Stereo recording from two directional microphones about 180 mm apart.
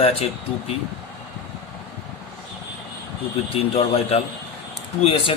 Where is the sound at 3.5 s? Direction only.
35° left (ahead or behind).